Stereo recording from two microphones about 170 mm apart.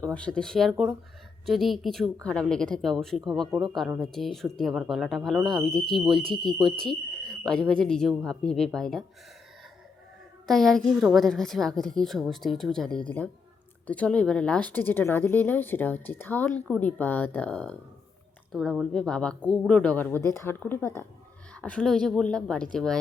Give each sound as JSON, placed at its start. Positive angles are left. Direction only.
{"t": 0.1, "sound": "a woman's voice", "side_deg": 5}
{"t": 6.1, "sound": "speech", "side_deg": -30}
{"t": 6.4, "sound": "a woman's voice", "side_deg": 5}
{"t": 10.4, "sound": "a woman's voice", "side_deg": 0}